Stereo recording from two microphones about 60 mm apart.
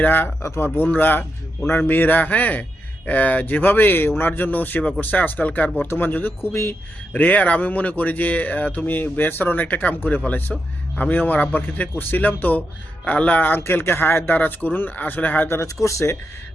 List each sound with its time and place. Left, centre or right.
0.0 s speech: left
6.4 s speech: left
7.1 s speech: left
10.5 s speech: centre
10.9 s speech: left
13.6 s speech: left
15.4 s speech: left